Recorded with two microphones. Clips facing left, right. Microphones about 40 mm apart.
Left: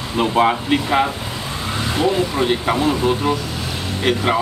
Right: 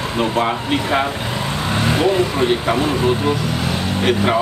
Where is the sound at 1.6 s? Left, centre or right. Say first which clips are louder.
Right 2 dB; right.